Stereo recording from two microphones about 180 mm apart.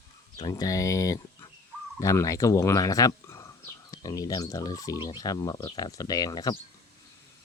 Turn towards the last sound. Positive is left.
turn(degrees=20)  # may be behind; listen again after turning